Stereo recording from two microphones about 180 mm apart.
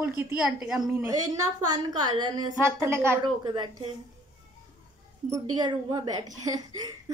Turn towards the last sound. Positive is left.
turn(degrees=-20)  # may be behind; listen again after turning